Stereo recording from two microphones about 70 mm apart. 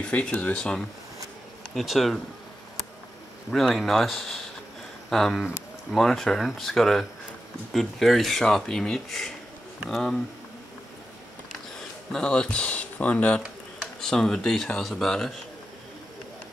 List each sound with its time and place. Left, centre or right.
0.0 s speech: centre
1.8 s speech: centre
3.5 s speech: centre
12.1 s speech: centre
13.7 s speech: centre